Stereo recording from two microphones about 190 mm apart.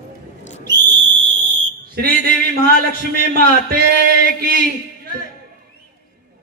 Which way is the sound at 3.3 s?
50° right (ahead or behind).